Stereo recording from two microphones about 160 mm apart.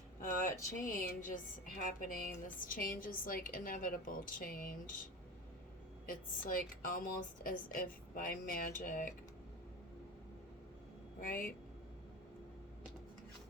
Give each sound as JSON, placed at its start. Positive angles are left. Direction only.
{"t": 0.9, "sound": "speech", "side_deg": 60}
{"t": 6.1, "sound": "speech", "side_deg": 60}
{"t": 11.2, "sound": "speech", "side_deg": 60}